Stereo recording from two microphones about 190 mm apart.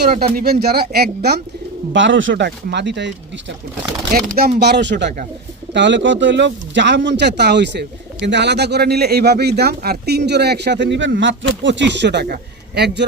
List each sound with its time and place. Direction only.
0.3 s a man's voice: 55° right (ahead or behind)
1.9 s speech: 70° right (ahead or behind)
4.1 s a man's voice: 50° right (ahead or behind)